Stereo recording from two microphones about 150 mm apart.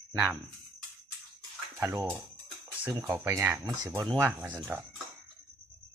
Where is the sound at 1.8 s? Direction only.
20° right (ahead or behind).